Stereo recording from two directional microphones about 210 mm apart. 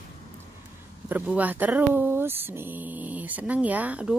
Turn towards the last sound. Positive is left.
turn(degrees=-5)  # may be behind; listen again after turning